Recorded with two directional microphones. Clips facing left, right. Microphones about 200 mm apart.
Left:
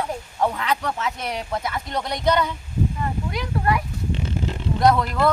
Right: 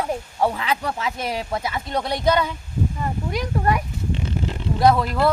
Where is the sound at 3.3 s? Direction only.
45° right (ahead or behind).